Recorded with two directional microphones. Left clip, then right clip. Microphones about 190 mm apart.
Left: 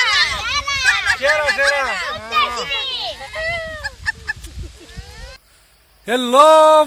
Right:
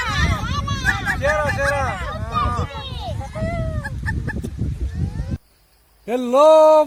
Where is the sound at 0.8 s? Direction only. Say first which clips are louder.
Left 4 dB; 20° left (ahead or behind).